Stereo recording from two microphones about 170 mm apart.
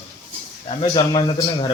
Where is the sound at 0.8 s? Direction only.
25° left (ahead or behind).